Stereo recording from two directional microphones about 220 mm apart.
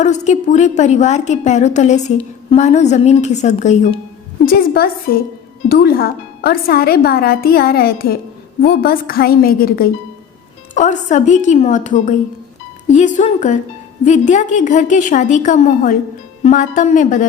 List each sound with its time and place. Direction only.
0.0 s a woman's voice: 30° left (ahead or behind)
4.4 s a woman's voice: 45° left (ahead or behind)